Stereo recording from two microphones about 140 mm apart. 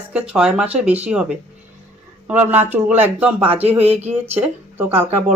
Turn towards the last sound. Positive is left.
turn(degrees=-15)  # may be behind; listen again after turning